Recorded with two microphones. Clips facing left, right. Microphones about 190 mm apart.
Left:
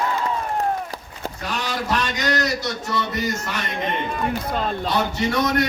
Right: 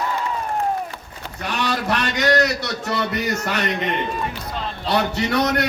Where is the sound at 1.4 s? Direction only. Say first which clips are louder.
Right 3 dB; 65° right (ahead or behind).